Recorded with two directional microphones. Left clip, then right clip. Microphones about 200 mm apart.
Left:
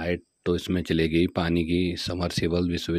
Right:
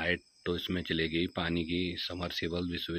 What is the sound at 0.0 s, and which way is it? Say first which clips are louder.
Speech: left 4 dB; 45° left (ahead or behind).